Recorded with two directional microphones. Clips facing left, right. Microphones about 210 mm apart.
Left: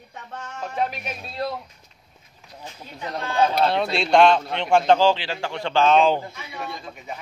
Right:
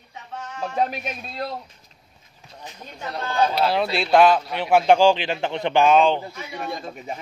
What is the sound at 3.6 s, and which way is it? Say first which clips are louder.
A man's voice: even; 5° right (ahead or behind).